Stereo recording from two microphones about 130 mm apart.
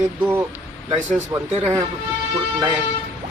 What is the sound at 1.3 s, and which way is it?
Speech, 20° right (ahead or behind).